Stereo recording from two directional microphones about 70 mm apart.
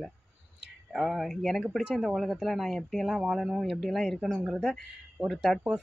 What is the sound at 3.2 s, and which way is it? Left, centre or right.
Speech, centre.